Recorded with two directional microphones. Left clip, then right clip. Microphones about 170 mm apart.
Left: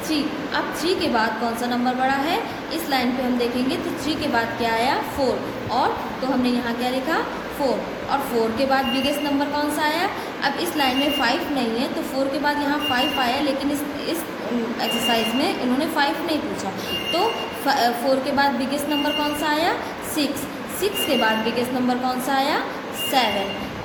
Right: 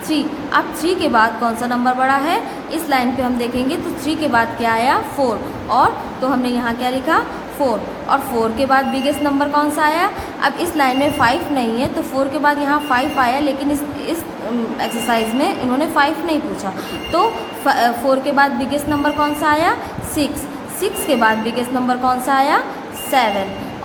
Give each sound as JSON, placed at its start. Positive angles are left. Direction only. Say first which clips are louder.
{"t": 0.1, "sound": "a woman's voice", "louder": "right 7 dB", "side_deg": -40}
{"t": 14.8, "sound": "a woman's voice", "louder": "right 3 dB", "side_deg": -40}
{"t": 20.8, "sound": "a woman's voice", "louder": "right 5 dB", "side_deg": -40}